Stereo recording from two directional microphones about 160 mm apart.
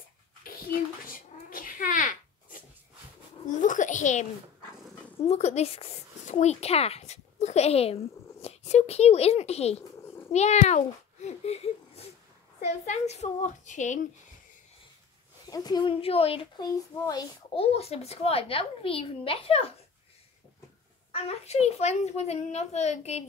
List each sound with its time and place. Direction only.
0.4 s a sound: 65° left (ahead or behind)
3.4 s a sound: 55° left (ahead or behind)
5.2 s a child's voice: 45° left (ahead or behind)
15.4 s a woman's voice: 25° left (ahead or behind)
17.0 s a child's voice: 25° left (ahead or behind)
17.6 s a woman's voice: 40° left (ahead or behind)
21.1 s a child's voice: 40° left (ahead or behind)